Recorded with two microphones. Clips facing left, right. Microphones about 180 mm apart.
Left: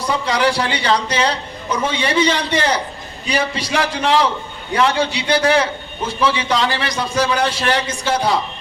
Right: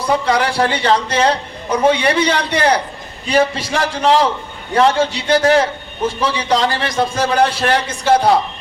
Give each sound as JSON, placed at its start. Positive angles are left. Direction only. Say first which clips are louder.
{"t": 0.3, "sound": "a man's voice", "louder": "right 2 dB", "side_deg": -55}
{"t": 3.2, "sound": "a man's voice", "louder": "right 5 dB", "side_deg": -50}